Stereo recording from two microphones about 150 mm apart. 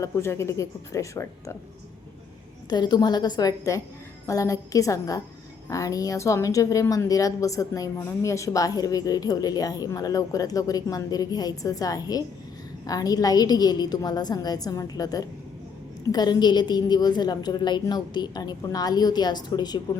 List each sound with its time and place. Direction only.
0.0 s a woman's voice: 20° left (ahead or behind)
2.6 s a woman's voice: 30° left (ahead or behind)